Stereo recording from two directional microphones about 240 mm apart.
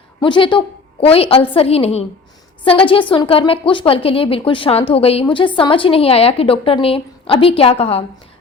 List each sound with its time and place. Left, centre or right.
0.2 s a woman's voice: centre